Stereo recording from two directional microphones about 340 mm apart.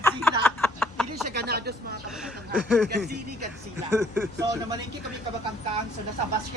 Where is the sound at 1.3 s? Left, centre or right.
Right.